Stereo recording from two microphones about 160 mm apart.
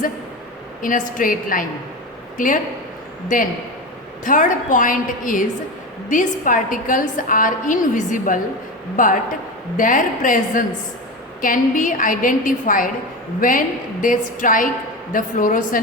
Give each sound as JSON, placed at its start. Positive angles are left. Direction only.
{"t": 0.8, "sound": "a woman's voice", "side_deg": 55}
{"t": 4.2, "sound": "a woman's voice", "side_deg": 55}